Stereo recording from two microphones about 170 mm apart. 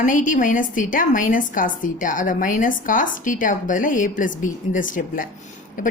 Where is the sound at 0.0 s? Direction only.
50° left (ahead or behind).